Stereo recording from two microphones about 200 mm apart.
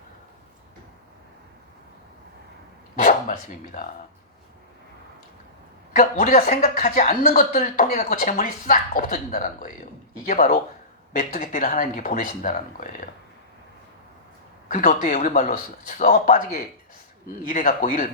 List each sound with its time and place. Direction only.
2.9 s speech: 45° left (ahead or behind)
6.0 s speech: 45° left (ahead or behind)
14.7 s speech: 45° left (ahead or behind)